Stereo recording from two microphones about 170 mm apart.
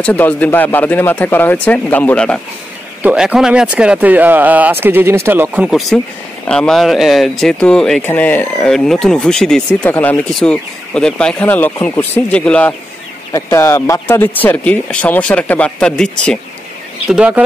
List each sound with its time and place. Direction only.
0.0 s speech: 10° left (ahead or behind)
3.0 s speech: 10° right (ahead or behind); by 12.7 s 5° left (ahead or behind)
13.3 s speech: 15° left (ahead or behind)
17.1 s speech: 5° right (ahead or behind)